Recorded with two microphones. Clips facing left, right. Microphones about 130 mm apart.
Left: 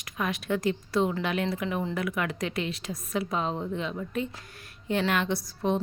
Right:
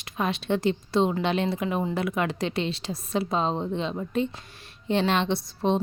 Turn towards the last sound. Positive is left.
turn(degrees=-25)  # may be behind; listen again after turning